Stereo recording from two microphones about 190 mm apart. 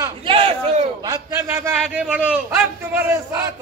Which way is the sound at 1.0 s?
15° right (ahead or behind).